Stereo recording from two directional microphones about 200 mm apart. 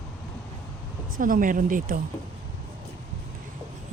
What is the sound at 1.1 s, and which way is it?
Speech, 45° right (ahead or behind).